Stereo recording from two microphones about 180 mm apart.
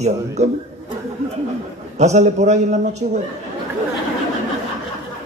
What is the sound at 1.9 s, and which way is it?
A man's voice, 40° right (ahead or behind).